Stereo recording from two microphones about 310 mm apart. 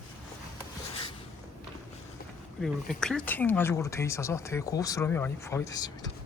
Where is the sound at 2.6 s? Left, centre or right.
Centre.